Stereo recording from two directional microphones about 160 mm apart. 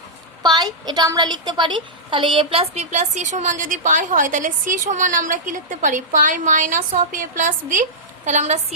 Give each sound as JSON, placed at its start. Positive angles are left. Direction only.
{"t": 0.4, "sound": "a woman's voice", "side_deg": -25}